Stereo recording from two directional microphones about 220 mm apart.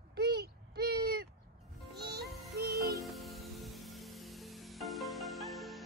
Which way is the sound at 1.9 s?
45° right (ahead or behind).